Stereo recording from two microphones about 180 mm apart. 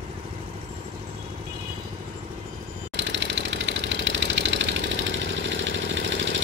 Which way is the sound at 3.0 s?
90° right.